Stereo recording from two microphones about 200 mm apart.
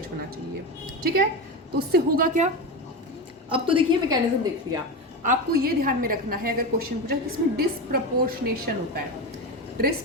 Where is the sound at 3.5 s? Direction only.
25° right (ahead or behind).